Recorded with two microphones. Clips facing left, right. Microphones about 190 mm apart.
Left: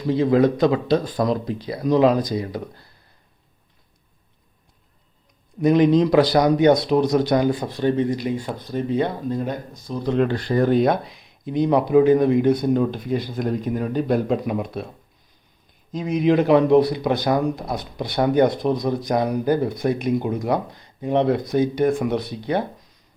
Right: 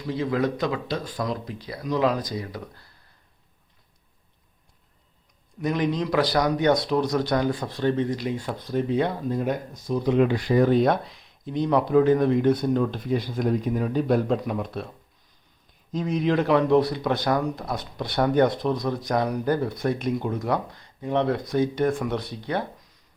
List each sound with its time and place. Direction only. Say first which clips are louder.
0.1 s speech: left 8 dB; 30° left (ahead or behind)
5.5 s speech: left 9 dB; 20° left (ahead or behind)
15.9 s speech: left 5 dB; 10° left (ahead or behind)